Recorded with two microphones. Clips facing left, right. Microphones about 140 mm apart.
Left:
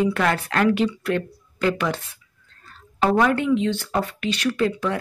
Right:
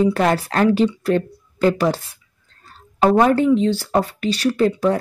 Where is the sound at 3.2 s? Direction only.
35° right (ahead or behind).